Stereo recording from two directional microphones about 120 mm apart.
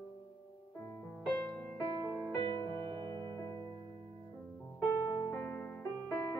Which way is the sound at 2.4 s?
45° right (ahead or behind).